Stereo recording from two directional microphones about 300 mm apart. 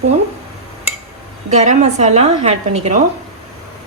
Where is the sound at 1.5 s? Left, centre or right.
Right.